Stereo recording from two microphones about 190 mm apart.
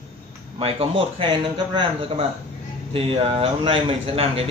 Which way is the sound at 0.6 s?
30° right (ahead or behind).